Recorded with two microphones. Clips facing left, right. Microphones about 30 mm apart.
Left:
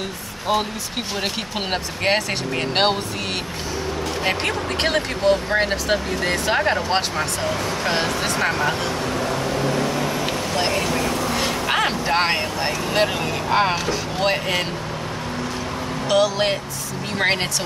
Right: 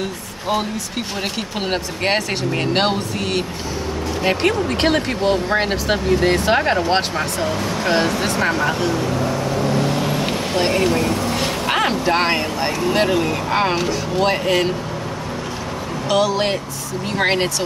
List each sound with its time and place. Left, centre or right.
0.5 s speech: centre
10.7 s speech: right
11.7 s speech: centre
16.1 s speech: centre